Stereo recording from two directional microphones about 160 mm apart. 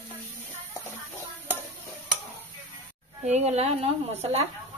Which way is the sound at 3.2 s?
45° right (ahead or behind).